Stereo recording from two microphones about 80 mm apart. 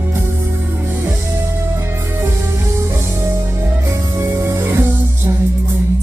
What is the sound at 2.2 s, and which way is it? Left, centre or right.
Music, right.